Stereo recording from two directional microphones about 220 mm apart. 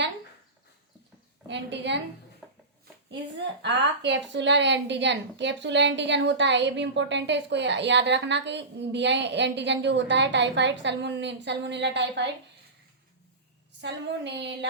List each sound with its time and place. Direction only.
1.5 s a woman's voice: 50° right (ahead or behind)
2.4 s a sound: centre (ahead or behind)
3.6 s a woman's voice: 55° right (ahead or behind)
13.8 s a woman's voice: 50° right (ahead or behind)